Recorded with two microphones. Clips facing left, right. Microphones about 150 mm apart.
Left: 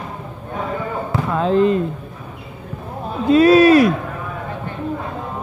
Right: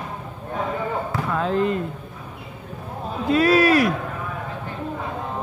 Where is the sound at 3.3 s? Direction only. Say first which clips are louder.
Left 7 dB; 25° left (ahead or behind).